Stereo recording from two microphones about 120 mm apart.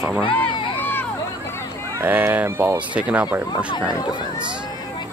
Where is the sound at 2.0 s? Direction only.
15° right (ahead or behind).